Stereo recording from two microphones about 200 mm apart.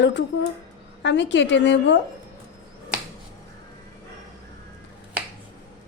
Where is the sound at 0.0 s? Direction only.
60° left (ahead or behind).